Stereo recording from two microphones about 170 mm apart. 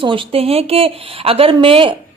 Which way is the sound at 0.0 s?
30° right (ahead or behind).